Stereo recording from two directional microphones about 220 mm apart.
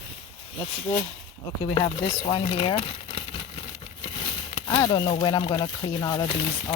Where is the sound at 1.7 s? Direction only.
25° left (ahead or behind).